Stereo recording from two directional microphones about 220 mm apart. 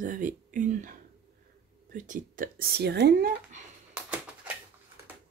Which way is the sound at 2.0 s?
35° right (ahead or behind).